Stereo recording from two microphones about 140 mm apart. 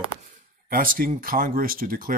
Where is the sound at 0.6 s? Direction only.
90° right.